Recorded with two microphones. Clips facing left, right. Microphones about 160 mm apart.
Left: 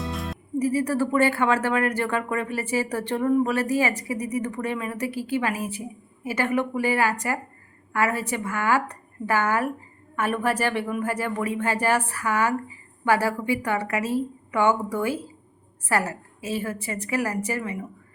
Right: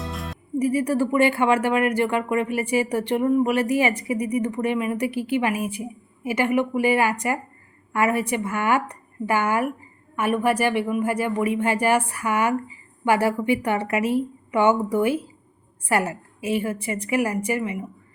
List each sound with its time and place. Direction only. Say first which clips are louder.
0.0 s music: left 1 dB; centre (ahead or behind)
0.6 s a woman's voice: right 2 dB; 15° right (ahead or behind)